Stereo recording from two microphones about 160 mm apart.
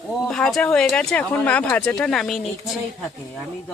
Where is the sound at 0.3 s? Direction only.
5° left (ahead or behind).